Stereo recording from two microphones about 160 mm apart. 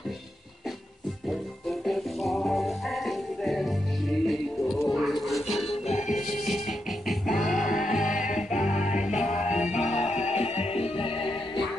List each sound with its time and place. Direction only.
1.2 s music: centre (ahead or behind)
5.9 s music: 45° left (ahead or behind)
6.2 s music: centre (ahead or behind)
9.7 s music: 45° left (ahead or behind)